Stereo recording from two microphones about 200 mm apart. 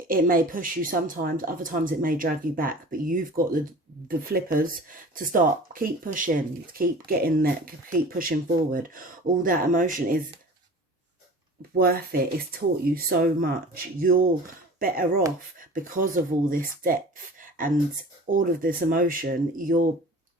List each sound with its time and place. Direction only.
0.1 s speech: 45° right (ahead or behind)
11.7 s speech: 50° right (ahead or behind)
17.4 s a sound: 45° right (ahead or behind)
18.3 s speech: 45° right (ahead or behind)